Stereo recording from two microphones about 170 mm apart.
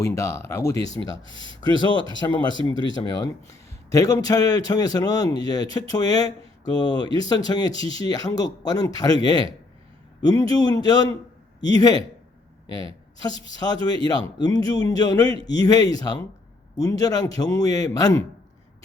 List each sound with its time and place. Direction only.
0.0 s a man's voice: 15° left (ahead or behind)
13.5 s a man's voice: 25° left (ahead or behind)